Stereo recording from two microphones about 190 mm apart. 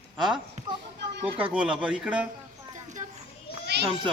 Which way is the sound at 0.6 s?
35° right (ahead or behind).